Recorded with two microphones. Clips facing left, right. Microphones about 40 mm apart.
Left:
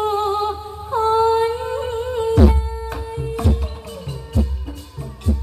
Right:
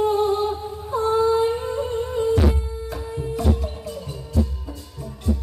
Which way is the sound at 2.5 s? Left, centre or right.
Left.